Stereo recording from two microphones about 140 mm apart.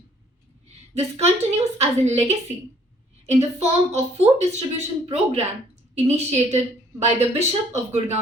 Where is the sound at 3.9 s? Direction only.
50° right (ahead or behind).